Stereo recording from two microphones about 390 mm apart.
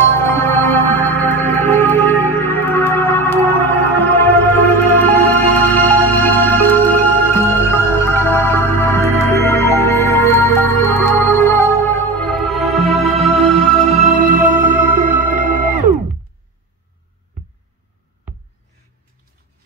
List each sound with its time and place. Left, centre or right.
0.0 s music: centre
14.0 s music: centre